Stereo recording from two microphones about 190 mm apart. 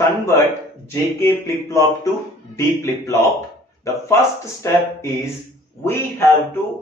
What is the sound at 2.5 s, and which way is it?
Speech, 15° left (ahead or behind).